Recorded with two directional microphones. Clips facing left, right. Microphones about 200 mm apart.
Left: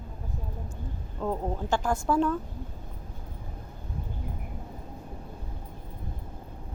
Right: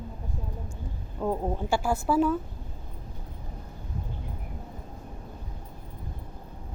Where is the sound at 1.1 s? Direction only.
10° right (ahead or behind).